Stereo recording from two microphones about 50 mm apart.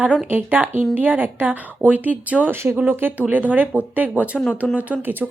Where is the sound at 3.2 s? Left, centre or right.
Right.